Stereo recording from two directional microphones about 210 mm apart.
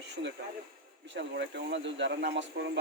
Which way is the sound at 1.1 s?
55° right (ahead or behind).